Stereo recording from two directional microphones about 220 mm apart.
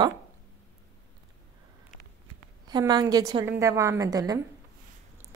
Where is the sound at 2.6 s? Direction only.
20° right (ahead or behind).